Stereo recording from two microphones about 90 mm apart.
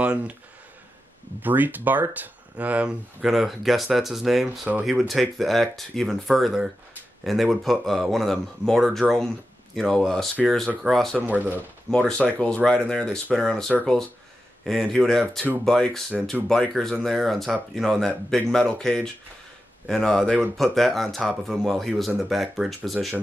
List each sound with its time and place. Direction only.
0.0 s speech: 10° right (ahead or behind)
1.4 s speech: 20° right (ahead or behind); by 11.1 s centre (ahead or behind)
11.1 s speech: 20° right (ahead or behind)
12.1 s speech: 15° left (ahead or behind)